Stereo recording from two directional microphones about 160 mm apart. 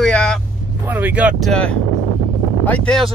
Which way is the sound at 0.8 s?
10° right (ahead or behind).